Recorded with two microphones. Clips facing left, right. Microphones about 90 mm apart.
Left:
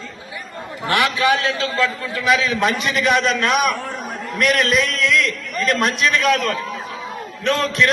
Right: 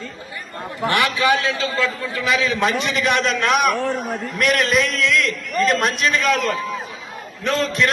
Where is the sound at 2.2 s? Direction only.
Centre (ahead or behind).